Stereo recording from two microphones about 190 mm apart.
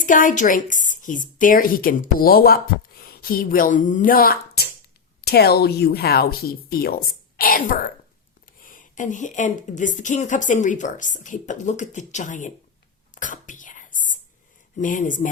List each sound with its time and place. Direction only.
0.0 s a woman's voice: 45° left (ahead or behind)
13.1 s whispering: 40° left (ahead or behind)
14.8 s a woman's voice: 45° left (ahead or behind)